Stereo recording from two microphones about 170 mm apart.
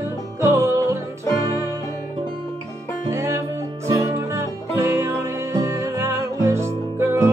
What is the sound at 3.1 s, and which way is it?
Music, 15° right (ahead or behind).